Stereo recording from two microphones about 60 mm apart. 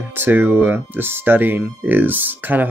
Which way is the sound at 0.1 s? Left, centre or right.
Right.